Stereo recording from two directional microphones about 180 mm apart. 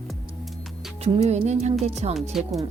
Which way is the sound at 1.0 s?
35° right (ahead or behind).